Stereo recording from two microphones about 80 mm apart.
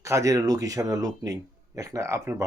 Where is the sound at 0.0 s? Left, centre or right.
Right.